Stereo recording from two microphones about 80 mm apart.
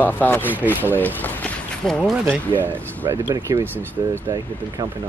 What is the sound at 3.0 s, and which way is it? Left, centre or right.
Speech, right.